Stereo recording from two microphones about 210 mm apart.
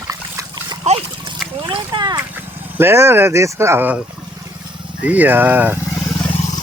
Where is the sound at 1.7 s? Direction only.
20° right (ahead or behind).